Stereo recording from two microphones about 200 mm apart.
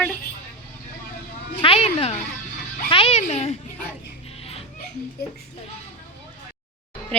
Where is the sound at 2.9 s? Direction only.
30° left (ahead or behind).